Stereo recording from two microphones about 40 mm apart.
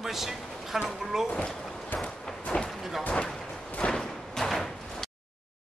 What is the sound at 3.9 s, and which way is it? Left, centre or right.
Door, centre.